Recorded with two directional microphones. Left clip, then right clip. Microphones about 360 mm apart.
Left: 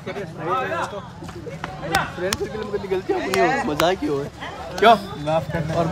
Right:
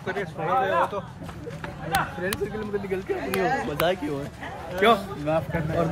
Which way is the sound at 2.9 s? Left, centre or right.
Centre.